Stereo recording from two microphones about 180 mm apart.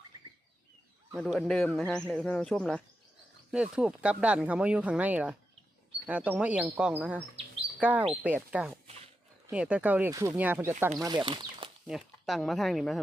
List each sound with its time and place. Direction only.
1.1 s speech: centre (ahead or behind)
3.5 s speech: 5° right (ahead or behind)
11.0 s speech: 25° right (ahead or behind)
11.9 s speech: centre (ahead or behind)